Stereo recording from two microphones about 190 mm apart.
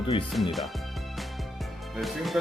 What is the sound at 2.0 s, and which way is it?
Speech, centre (ahead or behind).